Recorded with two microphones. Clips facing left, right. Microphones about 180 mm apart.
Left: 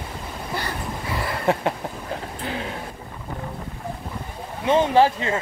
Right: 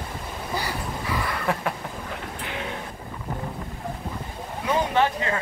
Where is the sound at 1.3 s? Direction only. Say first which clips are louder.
Left 8 dB; 25° left (ahead or behind).